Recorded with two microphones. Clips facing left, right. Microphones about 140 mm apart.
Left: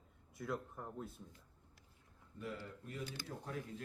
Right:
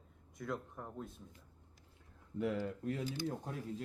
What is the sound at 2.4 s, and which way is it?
Speech, 70° right (ahead or behind).